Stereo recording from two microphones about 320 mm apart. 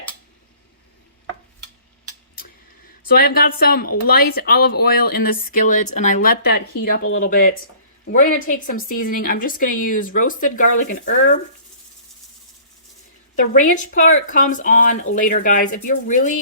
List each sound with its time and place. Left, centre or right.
3.1 s speech: left
13.5 s speech: left